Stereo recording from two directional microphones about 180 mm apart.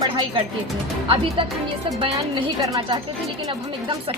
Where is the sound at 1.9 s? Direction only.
30° right (ahead or behind).